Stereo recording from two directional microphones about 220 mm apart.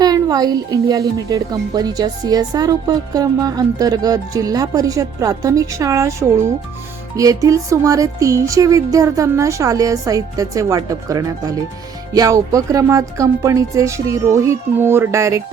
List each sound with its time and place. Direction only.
0.0 s a woman's voice: 15° right (ahead or behind)